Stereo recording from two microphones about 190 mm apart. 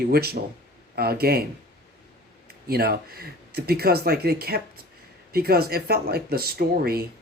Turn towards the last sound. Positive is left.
turn(degrees=-55)  # may be behind; listen again after turning